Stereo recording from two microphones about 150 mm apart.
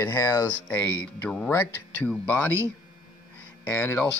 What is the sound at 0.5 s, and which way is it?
Speech, 10° left (ahead or behind).